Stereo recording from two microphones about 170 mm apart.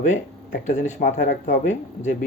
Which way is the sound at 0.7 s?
45° left (ahead or behind).